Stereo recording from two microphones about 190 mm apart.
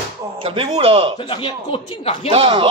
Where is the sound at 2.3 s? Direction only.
30° right (ahead or behind).